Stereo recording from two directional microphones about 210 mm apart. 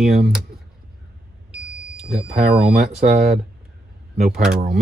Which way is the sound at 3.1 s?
30° right (ahead or behind).